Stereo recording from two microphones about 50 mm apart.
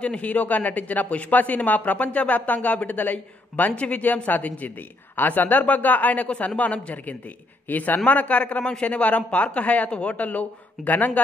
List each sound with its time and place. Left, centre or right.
0.0 s speech: left
3.7 s speech: left
4.0 s speech: left